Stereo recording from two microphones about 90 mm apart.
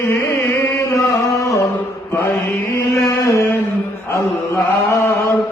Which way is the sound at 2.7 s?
35° left (ahead or behind).